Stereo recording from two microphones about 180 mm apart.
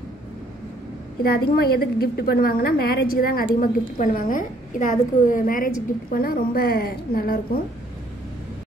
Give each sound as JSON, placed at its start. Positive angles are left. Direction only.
{"t": 1.2, "sound": "a woman's voice", "side_deg": 60}